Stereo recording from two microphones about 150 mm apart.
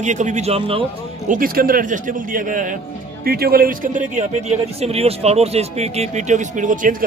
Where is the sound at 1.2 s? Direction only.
70° right (ahead or behind).